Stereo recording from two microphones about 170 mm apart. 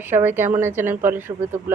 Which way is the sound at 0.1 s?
10° right (ahead or behind).